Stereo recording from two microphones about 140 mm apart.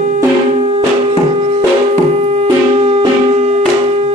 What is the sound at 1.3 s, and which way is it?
Music, 45° right (ahead or behind).